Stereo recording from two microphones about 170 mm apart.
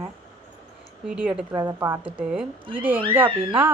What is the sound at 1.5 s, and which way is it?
A woman's voice, 20° right (ahead or behind).